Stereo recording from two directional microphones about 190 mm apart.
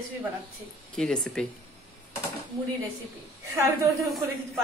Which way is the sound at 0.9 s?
5° left (ahead or behind).